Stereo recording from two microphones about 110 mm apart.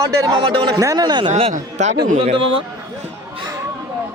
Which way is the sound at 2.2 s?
55° right (ahead or behind).